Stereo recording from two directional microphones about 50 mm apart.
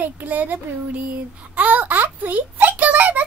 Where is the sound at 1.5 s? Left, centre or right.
Right.